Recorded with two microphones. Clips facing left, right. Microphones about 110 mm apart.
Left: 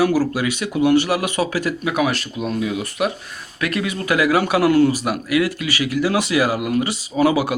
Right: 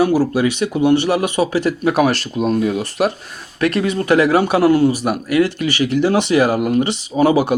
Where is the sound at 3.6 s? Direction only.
30° right (ahead or behind).